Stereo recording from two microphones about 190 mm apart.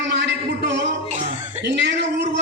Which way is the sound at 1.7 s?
65° right (ahead or behind).